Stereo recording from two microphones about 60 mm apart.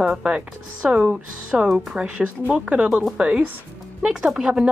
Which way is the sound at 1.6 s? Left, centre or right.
Centre.